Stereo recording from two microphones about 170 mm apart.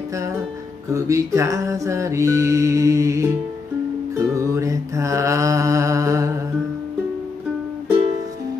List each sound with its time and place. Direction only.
0.9 s music: 20° right (ahead or behind)